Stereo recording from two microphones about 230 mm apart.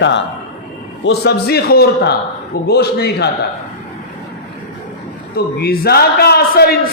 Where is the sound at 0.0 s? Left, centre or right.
Left.